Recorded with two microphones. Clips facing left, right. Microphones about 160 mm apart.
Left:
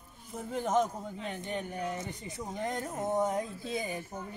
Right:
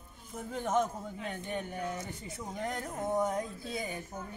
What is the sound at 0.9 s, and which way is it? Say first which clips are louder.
Speech: left 1 dB; 15° left (ahead or behind).